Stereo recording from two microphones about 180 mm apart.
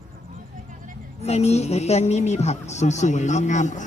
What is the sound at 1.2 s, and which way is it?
A man's voice, 35° left (ahead or behind).